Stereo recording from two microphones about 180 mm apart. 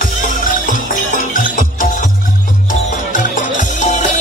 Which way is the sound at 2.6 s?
45° left (ahead or behind).